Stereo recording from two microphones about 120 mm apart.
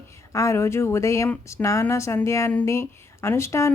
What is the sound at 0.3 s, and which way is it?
A woman's voice, 25° left (ahead or behind).